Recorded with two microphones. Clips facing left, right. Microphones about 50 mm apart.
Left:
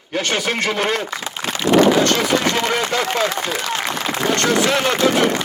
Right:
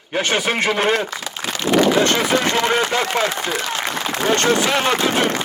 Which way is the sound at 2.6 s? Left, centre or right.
Right.